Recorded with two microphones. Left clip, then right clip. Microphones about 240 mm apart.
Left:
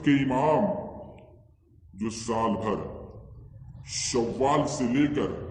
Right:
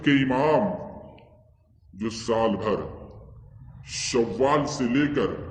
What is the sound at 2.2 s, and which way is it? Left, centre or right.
Speech, right.